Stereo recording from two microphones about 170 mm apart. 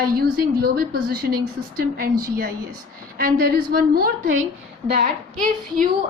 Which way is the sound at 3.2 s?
60° right (ahead or behind).